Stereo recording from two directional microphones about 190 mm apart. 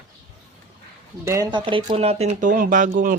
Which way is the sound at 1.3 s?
20° right (ahead or behind).